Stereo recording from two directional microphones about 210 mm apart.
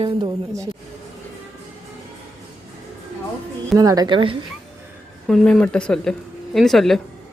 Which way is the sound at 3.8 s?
15° right (ahead or behind).